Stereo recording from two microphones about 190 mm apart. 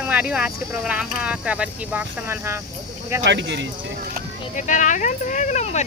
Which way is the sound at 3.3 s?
65° right (ahead or behind).